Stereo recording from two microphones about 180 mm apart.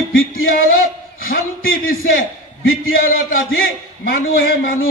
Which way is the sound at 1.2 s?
55° left (ahead or behind).